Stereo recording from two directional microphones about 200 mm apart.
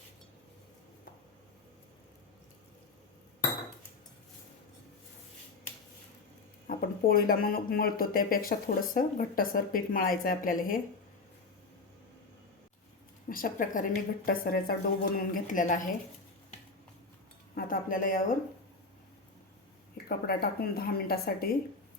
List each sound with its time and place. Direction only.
6.7 s speech: 45° left (ahead or behind)
13.2 s speech: 45° left (ahead or behind)
17.5 s speech: 45° left (ahead or behind)
20.1 s speech: 50° left (ahead or behind)